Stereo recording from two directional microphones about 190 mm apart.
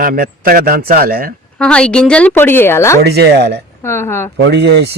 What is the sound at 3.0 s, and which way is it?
Speech, 60° right (ahead or behind).